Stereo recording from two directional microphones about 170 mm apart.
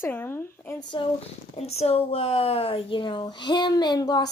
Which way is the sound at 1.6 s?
35° left (ahead or behind).